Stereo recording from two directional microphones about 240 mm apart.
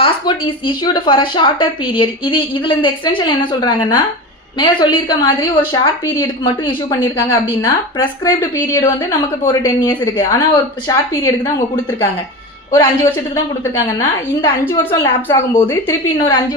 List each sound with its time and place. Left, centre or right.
0.0 s a woman's voice: left
12.7 s speech: centre